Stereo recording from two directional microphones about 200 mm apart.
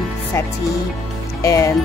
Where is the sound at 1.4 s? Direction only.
15° left (ahead or behind).